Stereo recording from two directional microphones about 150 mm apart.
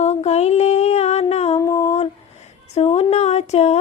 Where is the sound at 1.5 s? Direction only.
20° left (ahead or behind).